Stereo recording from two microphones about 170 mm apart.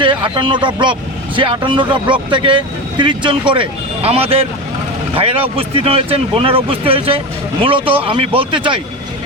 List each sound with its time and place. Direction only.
0.0 s speech: 30° right (ahead or behind)